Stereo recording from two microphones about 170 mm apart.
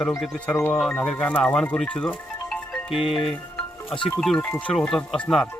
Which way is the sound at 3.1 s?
5° left (ahead or behind).